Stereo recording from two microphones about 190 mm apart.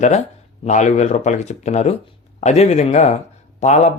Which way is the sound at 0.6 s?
40° left (ahead or behind).